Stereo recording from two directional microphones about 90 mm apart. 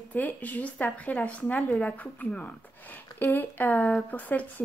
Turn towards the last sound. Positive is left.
turn(degrees=20)  # may be behind; listen again after turning